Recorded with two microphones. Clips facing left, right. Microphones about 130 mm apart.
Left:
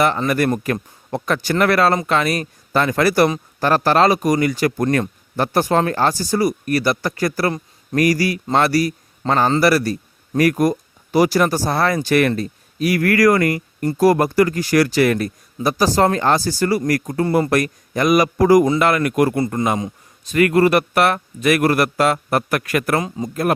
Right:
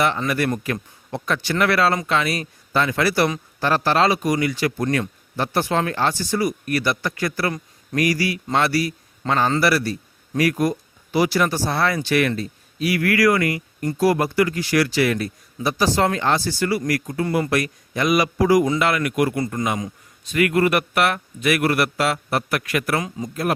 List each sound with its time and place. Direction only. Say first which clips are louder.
0.0 s speech: left 4 dB; 45° left (ahead or behind)